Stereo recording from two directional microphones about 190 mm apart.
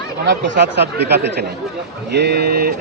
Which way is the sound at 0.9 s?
60° right (ahead or behind).